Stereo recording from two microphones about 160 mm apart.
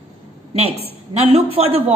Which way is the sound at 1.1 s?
40° right (ahead or behind).